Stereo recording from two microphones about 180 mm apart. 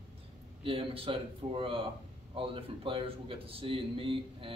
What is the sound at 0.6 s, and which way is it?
A man's voice, 30° right (ahead or behind).